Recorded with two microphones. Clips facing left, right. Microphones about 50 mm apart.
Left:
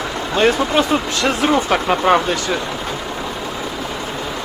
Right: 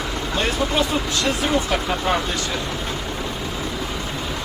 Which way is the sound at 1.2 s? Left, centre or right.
Left.